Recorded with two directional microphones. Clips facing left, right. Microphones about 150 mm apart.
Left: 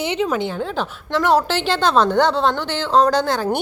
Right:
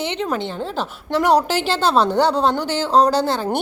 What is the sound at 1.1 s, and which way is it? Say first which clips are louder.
Speech: right 1 dB; 40° right (ahead or behind).